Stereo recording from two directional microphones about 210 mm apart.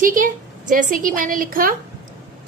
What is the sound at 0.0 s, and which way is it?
Speech, 40° right (ahead or behind).